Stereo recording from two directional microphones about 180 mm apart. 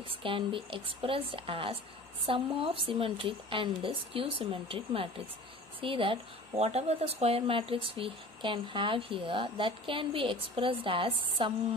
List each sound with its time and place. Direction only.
0.1 s speech: 30° right (ahead or behind)